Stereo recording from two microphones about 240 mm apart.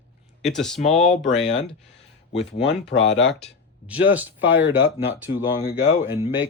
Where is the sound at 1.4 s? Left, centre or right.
Left.